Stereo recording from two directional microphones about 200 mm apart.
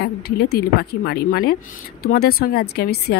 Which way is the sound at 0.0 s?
50° left (ahead or behind).